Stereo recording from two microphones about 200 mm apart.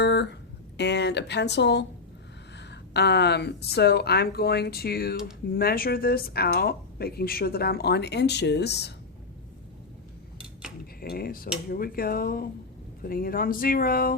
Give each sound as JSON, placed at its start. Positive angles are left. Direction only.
{"t": 0.0, "sound": "a sound", "side_deg": 60}
{"t": 0.8, "sound": "a woman's voice", "side_deg": 60}
{"t": 11.0, "sound": "a woman's voice", "side_deg": 50}